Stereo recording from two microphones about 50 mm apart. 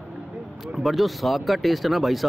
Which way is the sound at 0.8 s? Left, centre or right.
Centre.